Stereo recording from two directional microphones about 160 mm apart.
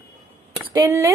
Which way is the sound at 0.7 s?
20° right (ahead or behind).